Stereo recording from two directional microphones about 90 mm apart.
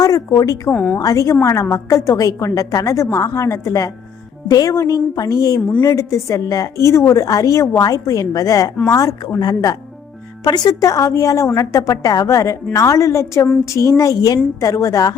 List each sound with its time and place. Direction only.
0.3 s a woman's voice: 40° left (ahead or behind)